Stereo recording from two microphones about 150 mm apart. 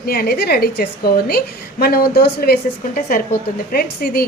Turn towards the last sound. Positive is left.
turn(degrees=85)